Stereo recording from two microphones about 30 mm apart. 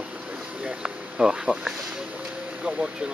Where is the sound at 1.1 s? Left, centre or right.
Right.